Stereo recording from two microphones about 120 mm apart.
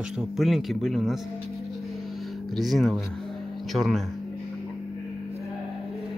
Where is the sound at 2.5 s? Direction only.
Centre (ahead or behind).